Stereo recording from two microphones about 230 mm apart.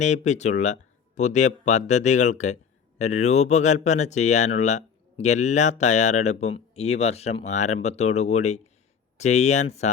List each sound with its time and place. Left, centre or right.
0.0 s speech: left